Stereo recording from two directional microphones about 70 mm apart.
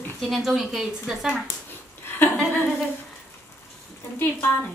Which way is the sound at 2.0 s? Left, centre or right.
Left.